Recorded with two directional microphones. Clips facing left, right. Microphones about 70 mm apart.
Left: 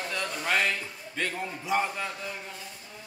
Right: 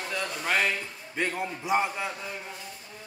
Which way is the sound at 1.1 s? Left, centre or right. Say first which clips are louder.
Right 2 dB; centre.